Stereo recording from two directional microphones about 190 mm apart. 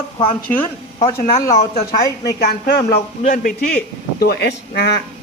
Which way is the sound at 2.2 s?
55° left (ahead or behind).